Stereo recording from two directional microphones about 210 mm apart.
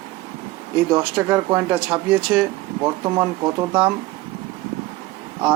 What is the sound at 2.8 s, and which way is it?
Speech, 15° right (ahead or behind).